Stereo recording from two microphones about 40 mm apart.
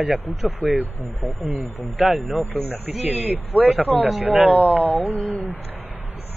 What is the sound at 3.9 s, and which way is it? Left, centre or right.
Speech, centre.